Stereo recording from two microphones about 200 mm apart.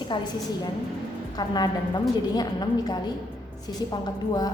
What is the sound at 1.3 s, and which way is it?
A woman's voice, 20° left (ahead or behind).